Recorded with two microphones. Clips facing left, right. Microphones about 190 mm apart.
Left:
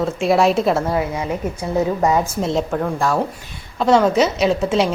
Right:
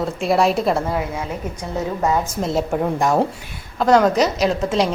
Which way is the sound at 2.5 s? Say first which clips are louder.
Even; 5° right (ahead or behind).